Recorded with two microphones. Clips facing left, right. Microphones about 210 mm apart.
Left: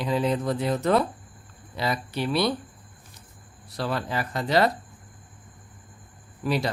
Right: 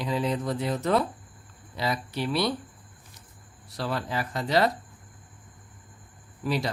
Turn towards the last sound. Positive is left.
turn(degrees=60)  # may be behind; listen again after turning